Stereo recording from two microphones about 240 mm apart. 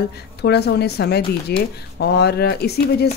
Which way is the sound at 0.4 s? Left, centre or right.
Left.